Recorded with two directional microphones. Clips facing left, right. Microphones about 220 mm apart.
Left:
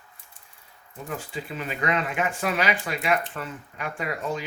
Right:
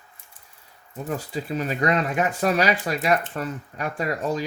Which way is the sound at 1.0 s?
40° right (ahead or behind).